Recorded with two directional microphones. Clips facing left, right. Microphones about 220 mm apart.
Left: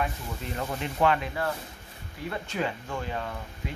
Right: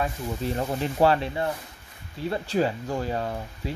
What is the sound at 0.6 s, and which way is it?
Speech, 30° right (ahead or behind).